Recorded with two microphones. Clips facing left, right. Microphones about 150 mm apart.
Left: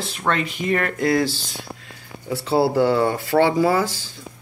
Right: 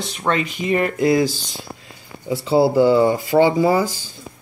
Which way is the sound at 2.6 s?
15° right (ahead or behind).